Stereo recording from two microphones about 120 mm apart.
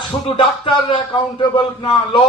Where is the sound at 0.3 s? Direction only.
45° left (ahead or behind).